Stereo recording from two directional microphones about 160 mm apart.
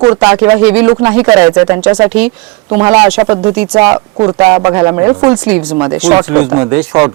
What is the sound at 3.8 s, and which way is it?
Speech, 30° right (ahead or behind).